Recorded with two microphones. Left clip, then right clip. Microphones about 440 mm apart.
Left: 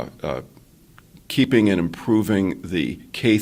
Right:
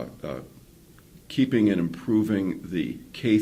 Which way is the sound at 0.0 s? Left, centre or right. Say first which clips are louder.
Left 7 dB; left.